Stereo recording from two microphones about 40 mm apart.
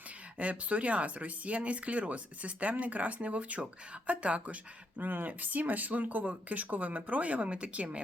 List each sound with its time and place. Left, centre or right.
0.3 s speech: right
4.9 s speech: right